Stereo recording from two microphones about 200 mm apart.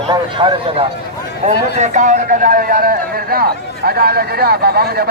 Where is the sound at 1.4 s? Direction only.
35° right (ahead or behind).